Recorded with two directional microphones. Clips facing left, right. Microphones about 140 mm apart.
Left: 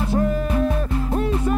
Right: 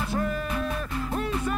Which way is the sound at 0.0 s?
30° left (ahead or behind).